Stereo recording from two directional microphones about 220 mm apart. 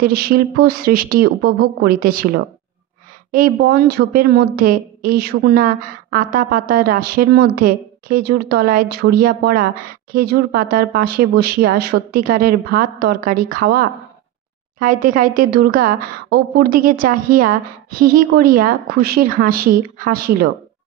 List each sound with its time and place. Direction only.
0.0 s a woman's voice: 45° right (ahead or behind)